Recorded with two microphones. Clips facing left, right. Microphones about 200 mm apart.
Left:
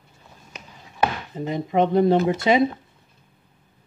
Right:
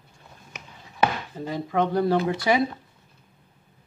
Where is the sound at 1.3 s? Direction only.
20° left (ahead or behind).